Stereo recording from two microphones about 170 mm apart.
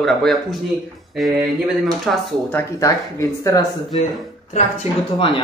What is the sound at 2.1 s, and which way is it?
Speech, centre (ahead or behind).